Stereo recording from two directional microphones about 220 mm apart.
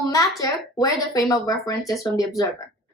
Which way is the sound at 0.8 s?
15° left (ahead or behind).